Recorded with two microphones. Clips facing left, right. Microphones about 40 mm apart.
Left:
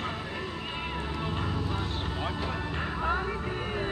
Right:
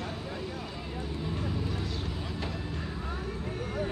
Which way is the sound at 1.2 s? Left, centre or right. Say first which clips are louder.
Even; left.